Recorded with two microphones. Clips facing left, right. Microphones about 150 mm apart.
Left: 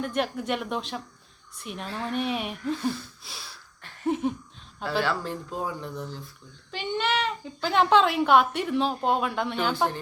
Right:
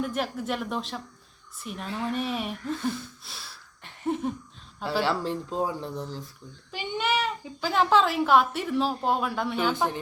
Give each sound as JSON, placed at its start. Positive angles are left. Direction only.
{"t": 0.0, "sound": "speech", "side_deg": 0}
{"t": 4.0, "sound": "a sound", "side_deg": 0}
{"t": 5.0, "sound": "speech", "side_deg": -30}
{"t": 6.7, "sound": "a child's voice", "side_deg": -10}